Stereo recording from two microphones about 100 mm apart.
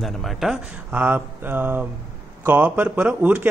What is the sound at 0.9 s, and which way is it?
A man's voice, 15° right (ahead or behind).